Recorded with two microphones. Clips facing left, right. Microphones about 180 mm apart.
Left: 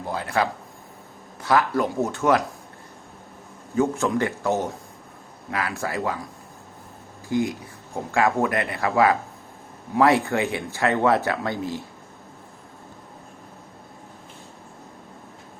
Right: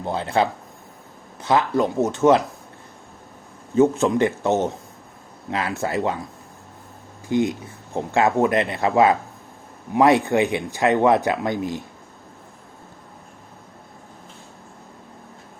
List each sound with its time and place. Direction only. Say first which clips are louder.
0.0 s speech: right 3 dB; 25° right (ahead or behind)
3.8 s speech: right 5 dB; 20° right (ahead or behind)
7.3 s speech: right 3 dB; 20° right (ahead or behind)